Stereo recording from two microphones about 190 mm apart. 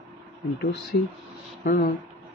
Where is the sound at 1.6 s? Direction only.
50° left (ahead or behind).